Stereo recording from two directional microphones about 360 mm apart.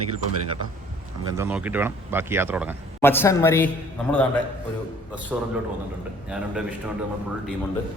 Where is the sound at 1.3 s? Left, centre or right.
Centre.